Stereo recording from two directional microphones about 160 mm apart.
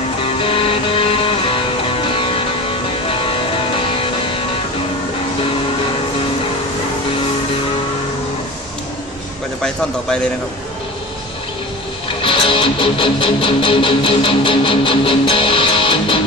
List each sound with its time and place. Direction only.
0.4 s music: 35° left (ahead or behind)
3.8 s music: 35° left (ahead or behind)
9.6 s a man's voice: 5° left (ahead or behind)
12.2 s music: 30° left (ahead or behind)